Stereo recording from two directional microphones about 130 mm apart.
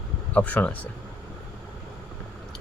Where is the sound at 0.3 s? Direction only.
10° left (ahead or behind).